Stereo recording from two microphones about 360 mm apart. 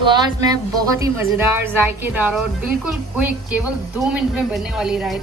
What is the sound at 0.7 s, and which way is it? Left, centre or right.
A woman's voice, centre.